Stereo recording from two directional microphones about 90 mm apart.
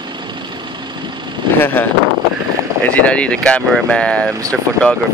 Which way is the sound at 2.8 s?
15° left (ahead or behind).